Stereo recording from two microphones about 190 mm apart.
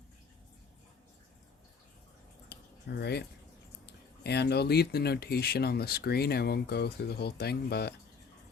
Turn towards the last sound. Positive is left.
turn(degrees=60)  # may be behind; listen again after turning